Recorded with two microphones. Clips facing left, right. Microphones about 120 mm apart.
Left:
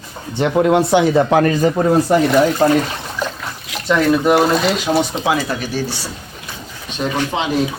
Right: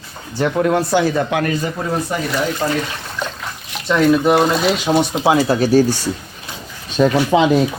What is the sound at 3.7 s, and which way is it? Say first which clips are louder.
Speech: right 1 dB; centre (ahead or behind).